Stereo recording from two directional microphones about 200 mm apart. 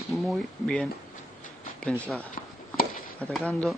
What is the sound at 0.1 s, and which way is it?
Speech, centre (ahead or behind).